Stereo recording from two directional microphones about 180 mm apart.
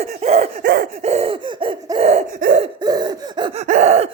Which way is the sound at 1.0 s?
35° right (ahead or behind).